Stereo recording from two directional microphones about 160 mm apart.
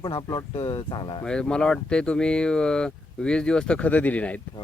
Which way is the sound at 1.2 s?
5° left (ahead or behind).